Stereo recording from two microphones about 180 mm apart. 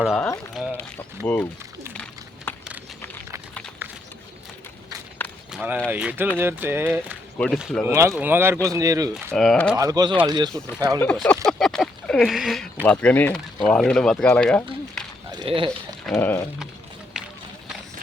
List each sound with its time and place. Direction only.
0.6 s speech: centre (ahead or behind)
1.3 s speech: 10° left (ahead or behind)
1.9 s a sound: 10° left (ahead or behind)
5.5 s walk: 5° right (ahead or behind)
5.9 s speech: 10° right (ahead or behind)
7.3 s speech: 5° left (ahead or behind)
7.9 s speech: 15° right (ahead or behind)
9.3 s speech: centre (ahead or behind)
9.7 s speech: 20° right (ahead or behind)
11.0 s speech: 5° left (ahead or behind)
15.3 s a sound: 25° right (ahead or behind)
16.1 s speech: 15° left (ahead or behind)
17.2 s run: 5° right (ahead or behind)